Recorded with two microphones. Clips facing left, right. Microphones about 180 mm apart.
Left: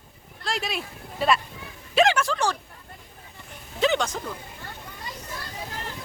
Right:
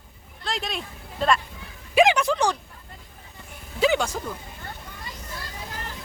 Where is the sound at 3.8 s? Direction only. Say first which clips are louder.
Right 1 dB; 5° right (ahead or behind).